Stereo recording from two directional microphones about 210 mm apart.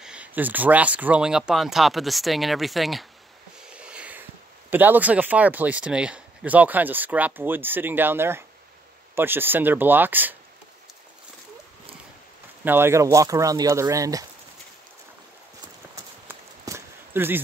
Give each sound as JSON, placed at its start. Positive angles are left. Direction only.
{"t": 0.0, "sound": "speech", "side_deg": -5}
{"t": 12.6, "sound": "speech", "side_deg": -10}
{"t": 16.3, "sound": "walk", "side_deg": -10}